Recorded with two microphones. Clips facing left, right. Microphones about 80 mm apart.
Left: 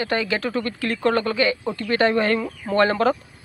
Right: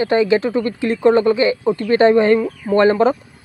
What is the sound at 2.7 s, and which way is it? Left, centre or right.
Speech, right.